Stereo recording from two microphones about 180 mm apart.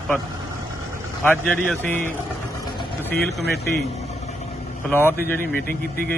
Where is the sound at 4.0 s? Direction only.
35° left (ahead or behind).